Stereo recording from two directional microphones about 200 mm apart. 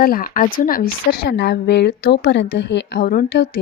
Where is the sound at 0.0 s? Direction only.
45° left (ahead or behind).